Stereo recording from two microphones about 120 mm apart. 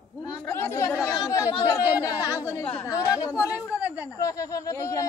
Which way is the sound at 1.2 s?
30° left (ahead or behind).